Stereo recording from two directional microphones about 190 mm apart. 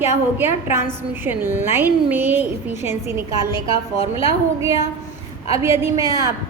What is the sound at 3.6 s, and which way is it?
Speech, 30° left (ahead or behind).